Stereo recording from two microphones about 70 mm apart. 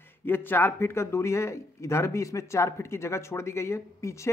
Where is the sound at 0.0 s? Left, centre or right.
Left.